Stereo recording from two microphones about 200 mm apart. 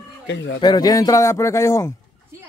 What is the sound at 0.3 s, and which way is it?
Speech, 65° left (ahead or behind).